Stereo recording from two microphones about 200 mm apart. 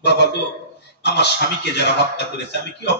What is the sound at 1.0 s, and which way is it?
Speech, 55° left (ahead or behind).